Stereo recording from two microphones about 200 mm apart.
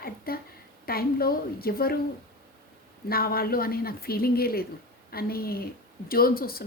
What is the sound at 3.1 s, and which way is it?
Speech, 50° left (ahead or behind).